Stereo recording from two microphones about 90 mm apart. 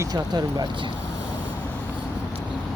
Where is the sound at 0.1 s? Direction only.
50° right (ahead or behind).